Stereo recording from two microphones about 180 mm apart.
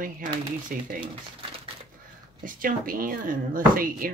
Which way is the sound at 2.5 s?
50° right (ahead or behind).